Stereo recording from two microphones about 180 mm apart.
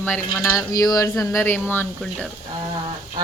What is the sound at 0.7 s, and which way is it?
Speech, 20° left (ahead or behind).